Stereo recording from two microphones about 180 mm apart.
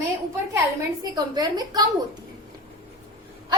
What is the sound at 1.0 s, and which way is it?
Speech, 25° right (ahead or behind).